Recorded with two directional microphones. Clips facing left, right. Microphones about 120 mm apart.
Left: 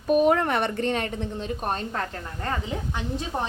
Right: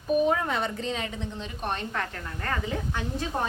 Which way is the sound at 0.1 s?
70° left (ahead or behind).